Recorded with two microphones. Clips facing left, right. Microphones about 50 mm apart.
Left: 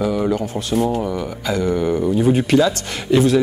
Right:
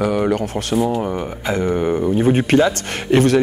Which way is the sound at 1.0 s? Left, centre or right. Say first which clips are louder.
Right 1 dB; right.